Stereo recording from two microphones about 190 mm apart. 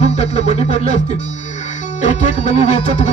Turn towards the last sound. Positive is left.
turn(degrees=35)  # may be behind; listen again after turning